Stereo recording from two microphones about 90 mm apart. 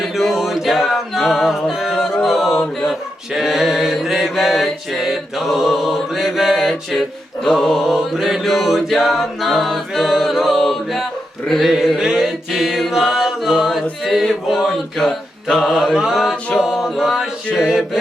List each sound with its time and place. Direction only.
0.0 s a capella: centre (ahead or behind)
3.3 s mantra: centre (ahead or behind)